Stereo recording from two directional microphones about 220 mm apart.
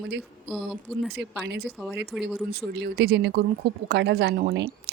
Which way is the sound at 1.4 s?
50° right (ahead or behind).